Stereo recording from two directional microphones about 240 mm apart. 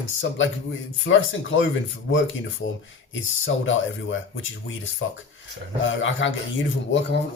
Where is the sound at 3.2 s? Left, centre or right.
Left.